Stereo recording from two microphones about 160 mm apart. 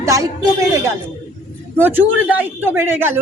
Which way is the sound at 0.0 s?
20° right (ahead or behind).